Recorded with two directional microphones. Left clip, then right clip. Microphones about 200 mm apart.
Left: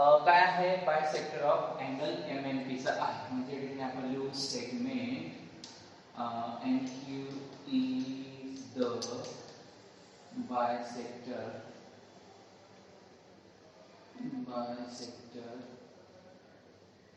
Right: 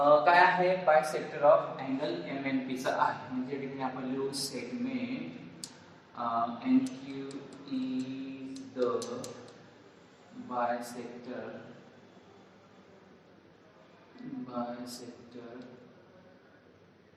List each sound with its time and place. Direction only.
0.0 s a man's voice: 15° right (ahead or behind)
10.5 s a man's voice: 15° right (ahead or behind)
14.5 s a man's voice: 15° right (ahead or behind)